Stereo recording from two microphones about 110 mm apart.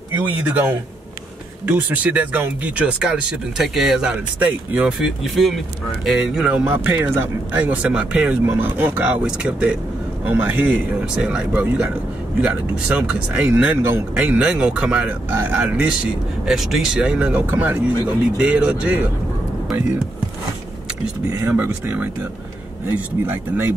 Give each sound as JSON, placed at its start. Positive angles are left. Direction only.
{"t": 0.2, "sound": "speech", "side_deg": -15}
{"t": 16.4, "sound": "speech", "side_deg": -5}
{"t": 21.3, "sound": "speech", "side_deg": -30}
{"t": 21.5, "sound": "speech", "side_deg": -15}
{"t": 23.2, "sound": "speech", "side_deg": -15}